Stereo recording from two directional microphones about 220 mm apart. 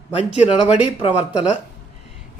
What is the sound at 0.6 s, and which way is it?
Speech, 5° right (ahead or behind).